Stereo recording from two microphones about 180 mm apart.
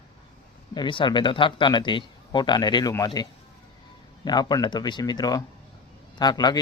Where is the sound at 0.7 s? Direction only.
25° left (ahead or behind).